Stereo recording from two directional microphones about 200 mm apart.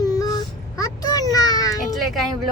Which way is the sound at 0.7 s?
20° left (ahead or behind).